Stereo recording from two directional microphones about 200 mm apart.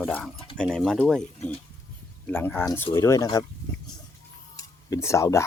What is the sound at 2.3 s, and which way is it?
Speech, 10° left (ahead or behind).